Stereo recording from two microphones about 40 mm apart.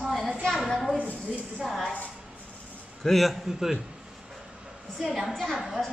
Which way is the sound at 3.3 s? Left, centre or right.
Centre.